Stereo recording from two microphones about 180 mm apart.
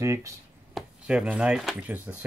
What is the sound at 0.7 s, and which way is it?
Speech, 5° right (ahead or behind).